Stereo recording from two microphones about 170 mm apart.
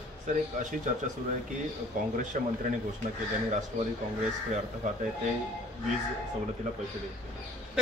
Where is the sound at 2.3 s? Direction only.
55° right (ahead or behind).